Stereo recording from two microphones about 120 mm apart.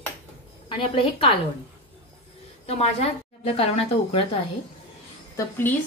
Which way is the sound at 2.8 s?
55° left (ahead or behind).